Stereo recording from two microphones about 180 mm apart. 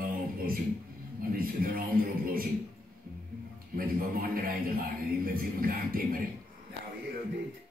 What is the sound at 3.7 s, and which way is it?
A man's voice, 55° right (ahead or behind).